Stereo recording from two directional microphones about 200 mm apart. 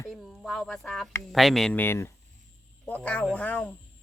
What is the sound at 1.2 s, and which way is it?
Speech, centre (ahead or behind).